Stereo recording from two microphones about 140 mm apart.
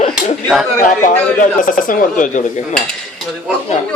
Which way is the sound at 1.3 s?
75° left (ahead or behind).